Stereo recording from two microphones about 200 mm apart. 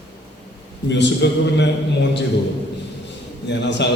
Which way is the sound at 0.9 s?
60° left (ahead or behind).